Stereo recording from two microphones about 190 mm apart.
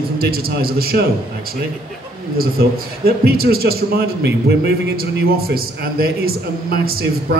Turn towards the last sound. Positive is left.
turn(degrees=-55)  # may be behind; listen again after turning